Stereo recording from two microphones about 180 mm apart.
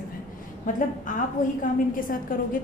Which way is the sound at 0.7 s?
45° left (ahead or behind).